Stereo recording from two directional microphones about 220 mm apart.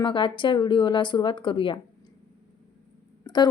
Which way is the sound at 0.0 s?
20° left (ahead or behind).